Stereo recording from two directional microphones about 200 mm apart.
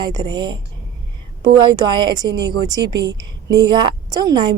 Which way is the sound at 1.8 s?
20° right (ahead or behind).